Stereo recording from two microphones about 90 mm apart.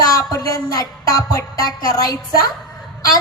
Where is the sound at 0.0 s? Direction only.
45° left (ahead or behind).